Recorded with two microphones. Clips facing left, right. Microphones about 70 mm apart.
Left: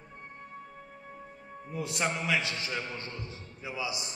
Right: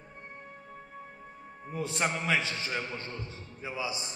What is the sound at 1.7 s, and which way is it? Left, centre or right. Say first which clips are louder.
A man's voice: right 1 dB; right.